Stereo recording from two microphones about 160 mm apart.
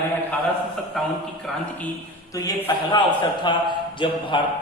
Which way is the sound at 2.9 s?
30° left (ahead or behind).